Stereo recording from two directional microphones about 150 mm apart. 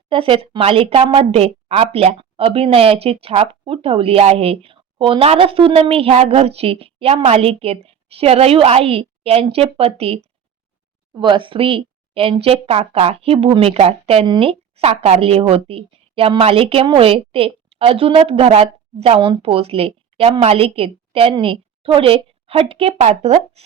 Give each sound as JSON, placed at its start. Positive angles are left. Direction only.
{"t": 0.1, "sound": "speech", "side_deg": -35}
{"t": 11.1, "sound": "speech", "side_deg": -30}